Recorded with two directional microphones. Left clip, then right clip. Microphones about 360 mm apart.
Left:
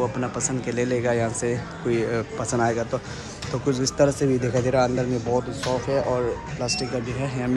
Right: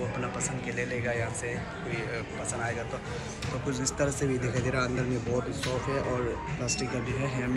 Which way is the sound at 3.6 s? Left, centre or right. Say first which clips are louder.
Left 10 dB; centre.